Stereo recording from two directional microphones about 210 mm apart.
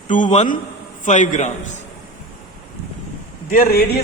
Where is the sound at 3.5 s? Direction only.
45° left (ahead or behind).